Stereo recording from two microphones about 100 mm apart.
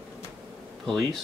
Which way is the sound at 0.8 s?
5° left (ahead or behind).